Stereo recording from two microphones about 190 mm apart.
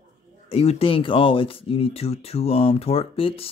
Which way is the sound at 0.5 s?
30° left (ahead or behind).